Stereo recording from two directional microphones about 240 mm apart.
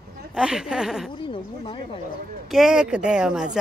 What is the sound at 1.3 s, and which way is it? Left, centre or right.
Speech, centre.